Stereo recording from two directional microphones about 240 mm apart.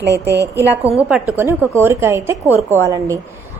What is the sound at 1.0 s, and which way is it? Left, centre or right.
A woman's voice, centre.